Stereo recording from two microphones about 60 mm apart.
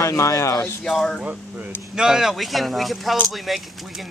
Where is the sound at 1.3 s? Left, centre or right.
Right.